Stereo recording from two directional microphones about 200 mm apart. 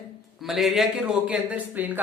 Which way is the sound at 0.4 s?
Centre (ahead or behind).